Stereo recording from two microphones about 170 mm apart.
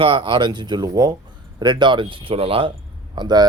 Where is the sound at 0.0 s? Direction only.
30° right (ahead or behind).